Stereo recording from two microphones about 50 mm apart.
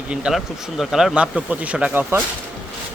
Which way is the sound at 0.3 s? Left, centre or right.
Centre.